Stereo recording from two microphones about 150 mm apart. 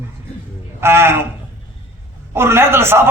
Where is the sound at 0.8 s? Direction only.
15° right (ahead or behind).